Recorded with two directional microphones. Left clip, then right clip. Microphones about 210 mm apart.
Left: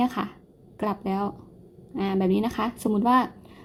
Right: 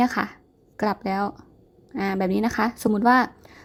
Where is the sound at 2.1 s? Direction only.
20° right (ahead or behind).